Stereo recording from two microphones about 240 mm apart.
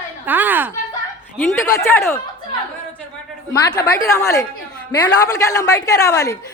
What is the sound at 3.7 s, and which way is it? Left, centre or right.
A man's voice, centre.